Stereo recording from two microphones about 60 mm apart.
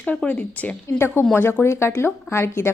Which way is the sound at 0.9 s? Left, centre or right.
Left.